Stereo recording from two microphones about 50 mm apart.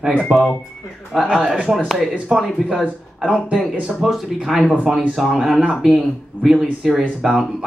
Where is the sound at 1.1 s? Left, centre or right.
Centre.